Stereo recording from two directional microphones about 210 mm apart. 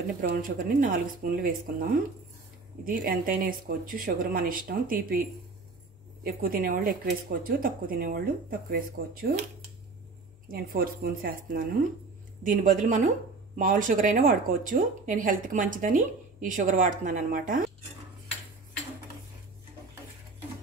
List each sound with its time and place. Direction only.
0.2 s speech: 40° right (ahead or behind)
6.2 s speech: 45° right (ahead or behind)
10.5 s speech: 45° right (ahead or behind)